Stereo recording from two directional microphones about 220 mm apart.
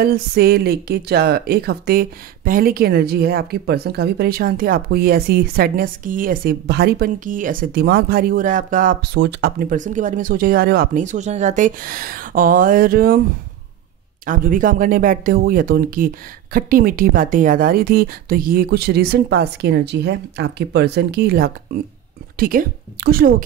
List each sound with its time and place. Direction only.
0.0 s speech: 45° right (ahead or behind)
14.2 s a woman's voice: 40° right (ahead or behind)